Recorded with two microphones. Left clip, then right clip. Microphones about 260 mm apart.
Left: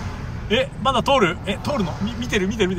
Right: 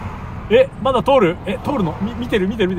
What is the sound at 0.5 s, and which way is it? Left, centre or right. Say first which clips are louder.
Speech: right 6 dB; centre.